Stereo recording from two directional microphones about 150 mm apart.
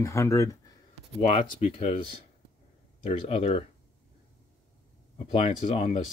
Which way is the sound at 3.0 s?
45° left (ahead or behind).